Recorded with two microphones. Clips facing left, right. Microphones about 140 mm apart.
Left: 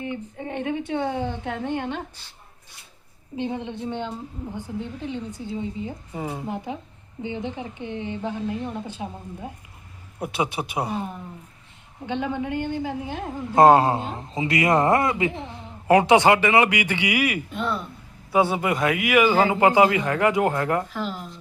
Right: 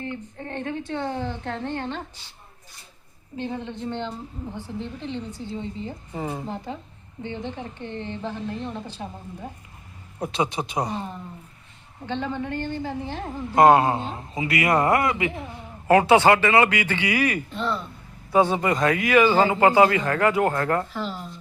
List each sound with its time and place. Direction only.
0.0 s a man's voice: 10° left (ahead or behind)
3.3 s a man's voice: 15° left (ahead or behind)
10.2 s a man's voice: 10° left (ahead or behind)
13.6 s speech: 25° left (ahead or behind)
13.9 s a man's voice: 5° left (ahead or behind)
14.2 s a man's voice: 25° left (ahead or behind); by 21.3 s 5° left (ahead or behind)